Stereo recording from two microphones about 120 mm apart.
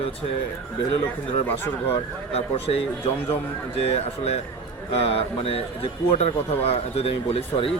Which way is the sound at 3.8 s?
60° left (ahead or behind).